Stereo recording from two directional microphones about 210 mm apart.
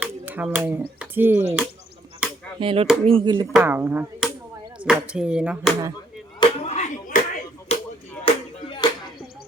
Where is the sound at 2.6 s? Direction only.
25° right (ahead or behind).